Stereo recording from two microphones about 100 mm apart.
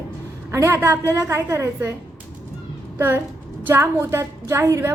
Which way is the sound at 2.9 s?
20° right (ahead or behind).